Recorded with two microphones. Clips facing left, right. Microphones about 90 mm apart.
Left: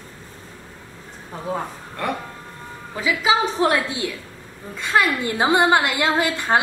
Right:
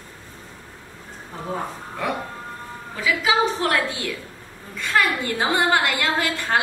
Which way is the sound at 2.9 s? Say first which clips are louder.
Left 1 dB; 20° left (ahead or behind).